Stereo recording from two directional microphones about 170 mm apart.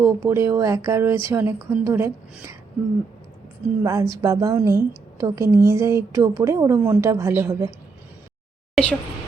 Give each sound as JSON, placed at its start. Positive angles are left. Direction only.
{"t": 0.0, "sound": "speech", "side_deg": -15}
{"t": 3.8, "sound": "speech", "side_deg": -20}
{"t": 8.7, "sound": "a sound", "side_deg": 5}